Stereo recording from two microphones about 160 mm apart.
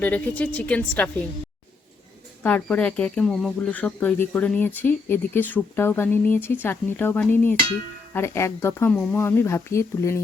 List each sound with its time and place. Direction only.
0.0 s speech: 10° left (ahead or behind)
2.4 s speech: 10° left (ahead or behind)